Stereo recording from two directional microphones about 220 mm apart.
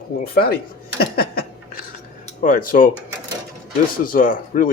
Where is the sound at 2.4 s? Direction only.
40° left (ahead or behind).